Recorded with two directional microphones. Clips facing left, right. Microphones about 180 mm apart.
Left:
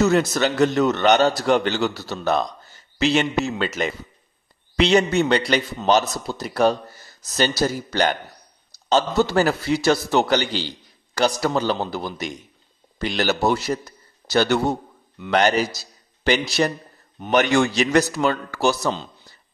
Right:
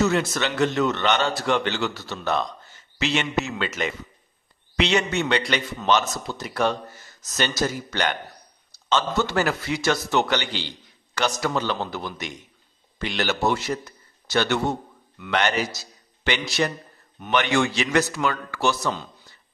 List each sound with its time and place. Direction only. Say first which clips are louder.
0.0 s a man's voice: left 4 dB; 40° left (ahead or behind)